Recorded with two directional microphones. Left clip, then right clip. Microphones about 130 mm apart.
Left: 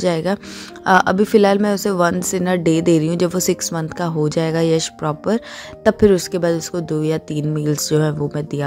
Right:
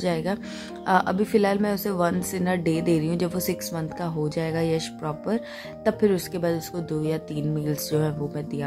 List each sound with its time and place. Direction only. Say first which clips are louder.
0.0 s a woman's voice: left 8 dB; 30° left (ahead or behind)